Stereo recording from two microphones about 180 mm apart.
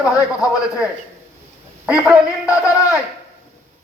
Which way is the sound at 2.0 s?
5° right (ahead or behind).